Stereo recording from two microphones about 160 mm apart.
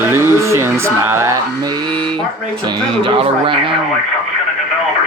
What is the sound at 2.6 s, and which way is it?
Speech, 35° right (ahead or behind).